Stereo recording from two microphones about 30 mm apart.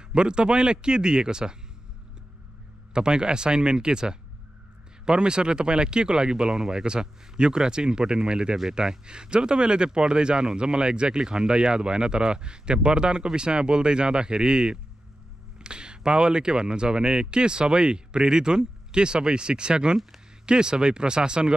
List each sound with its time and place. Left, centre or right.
0.1 s speech: right
2.9 s speech: right